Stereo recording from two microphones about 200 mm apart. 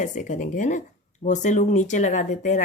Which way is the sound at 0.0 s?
40° left (ahead or behind).